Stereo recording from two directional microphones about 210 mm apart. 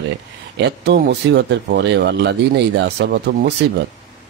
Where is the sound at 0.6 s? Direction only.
55° right (ahead or behind).